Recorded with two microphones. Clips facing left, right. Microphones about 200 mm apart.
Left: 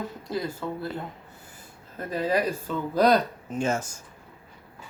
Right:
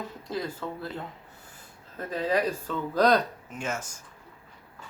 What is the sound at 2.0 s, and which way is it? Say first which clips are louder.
Speech: left 1 dB; 5° left (ahead or behind).